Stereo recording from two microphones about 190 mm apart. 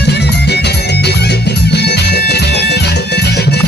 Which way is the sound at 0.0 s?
60° left (ahead or behind).